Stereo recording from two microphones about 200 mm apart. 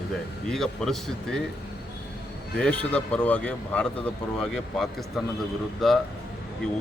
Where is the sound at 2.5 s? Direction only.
5° left (ahead or behind).